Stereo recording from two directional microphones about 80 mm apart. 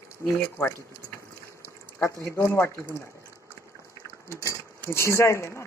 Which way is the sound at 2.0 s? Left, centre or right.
Left.